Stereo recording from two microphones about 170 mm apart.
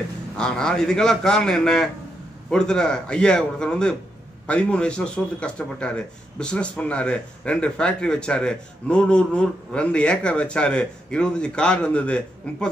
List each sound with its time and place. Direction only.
0.4 s a man's voice: 5° left (ahead or behind)